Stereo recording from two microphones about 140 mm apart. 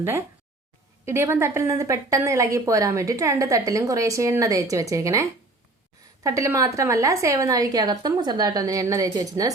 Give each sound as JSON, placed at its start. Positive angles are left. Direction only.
{"t": 1.0, "sound": "a woman's voice", "side_deg": -15}